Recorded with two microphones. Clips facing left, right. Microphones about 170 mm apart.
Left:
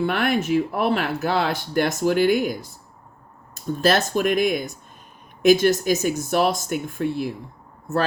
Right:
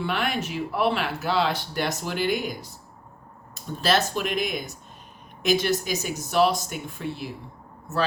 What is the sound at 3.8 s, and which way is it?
Speech, 50° left (ahead or behind).